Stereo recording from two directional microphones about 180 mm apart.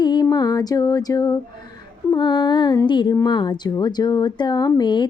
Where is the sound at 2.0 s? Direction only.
25° left (ahead or behind).